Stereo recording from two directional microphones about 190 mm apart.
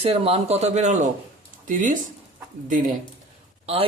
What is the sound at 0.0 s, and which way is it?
A man's voice, 30° right (ahead or behind).